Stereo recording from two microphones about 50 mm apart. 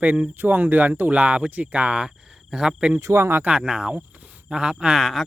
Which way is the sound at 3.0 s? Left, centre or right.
Right.